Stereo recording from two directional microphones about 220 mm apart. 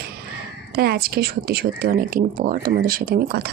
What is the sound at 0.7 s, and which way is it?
Speech, 45° right (ahead or behind).